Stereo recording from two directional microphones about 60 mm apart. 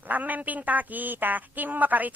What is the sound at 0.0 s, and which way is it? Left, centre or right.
Speech, right.